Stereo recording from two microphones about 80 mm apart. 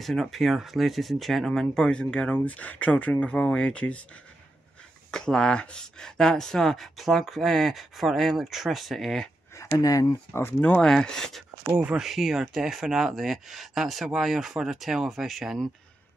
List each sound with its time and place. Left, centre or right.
0.0 s speech: centre
5.1 s speech: centre
9.8 s speech: left
10.6 s speech: centre
10.9 s speech: centre